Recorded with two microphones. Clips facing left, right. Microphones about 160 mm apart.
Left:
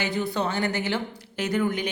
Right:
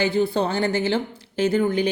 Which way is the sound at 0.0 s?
30° right (ahead or behind).